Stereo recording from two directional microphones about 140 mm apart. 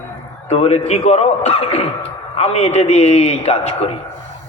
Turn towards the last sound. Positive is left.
turn(degrees=45)  # may be behind; listen again after turning